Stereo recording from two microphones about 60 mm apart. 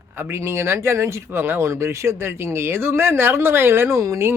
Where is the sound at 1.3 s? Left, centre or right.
Right.